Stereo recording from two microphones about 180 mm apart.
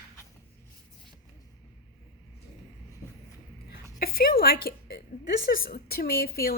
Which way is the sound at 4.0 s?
55° left (ahead or behind).